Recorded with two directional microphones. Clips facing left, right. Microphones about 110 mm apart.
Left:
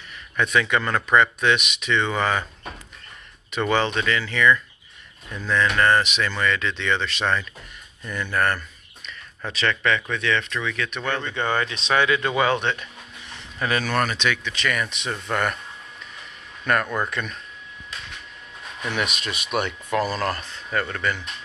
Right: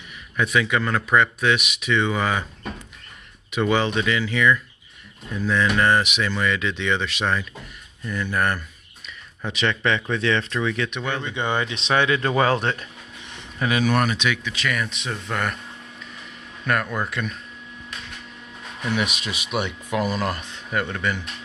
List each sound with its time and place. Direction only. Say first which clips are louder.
0.4 s speech: even; 5° right (ahead or behind)
3.5 s speech: right 1 dB; 10° right (ahead or behind); by 12.8 s 35° right (ahead or behind)
13.6 s speech: right 2 dB; 15° right (ahead or behind)
16.6 s speech: left 1 dB; centre (ahead or behind)
19.5 s speech: left 1 dB; 10° right (ahead or behind)